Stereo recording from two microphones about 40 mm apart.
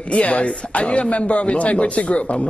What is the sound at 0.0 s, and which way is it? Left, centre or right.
Speech, left.